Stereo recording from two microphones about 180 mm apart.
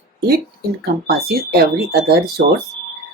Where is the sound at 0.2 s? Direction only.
60° right (ahead or behind).